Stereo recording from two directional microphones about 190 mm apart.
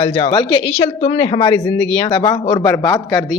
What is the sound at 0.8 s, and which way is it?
Speech, 30° left (ahead or behind).